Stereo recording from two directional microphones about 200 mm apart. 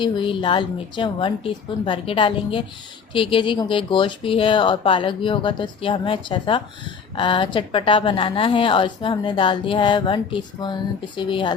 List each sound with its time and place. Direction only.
0.0 s a woman's voice: 25° left (ahead or behind)